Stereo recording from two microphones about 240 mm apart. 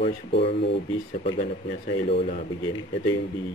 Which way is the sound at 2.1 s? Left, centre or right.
Left.